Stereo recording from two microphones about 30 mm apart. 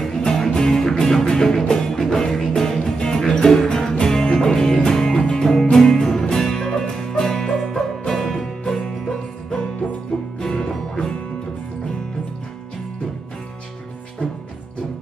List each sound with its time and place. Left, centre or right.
0.3 s music: left